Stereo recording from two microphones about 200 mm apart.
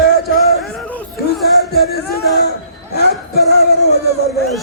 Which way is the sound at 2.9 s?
55° left (ahead or behind).